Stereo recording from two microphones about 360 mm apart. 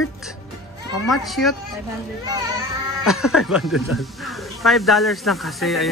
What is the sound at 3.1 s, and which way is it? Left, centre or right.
Speech, centre.